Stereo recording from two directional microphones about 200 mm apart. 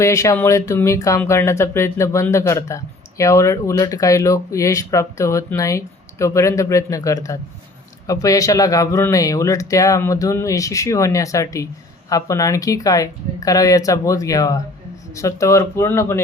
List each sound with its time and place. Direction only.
0.0 s speech: 15° left (ahead or behind)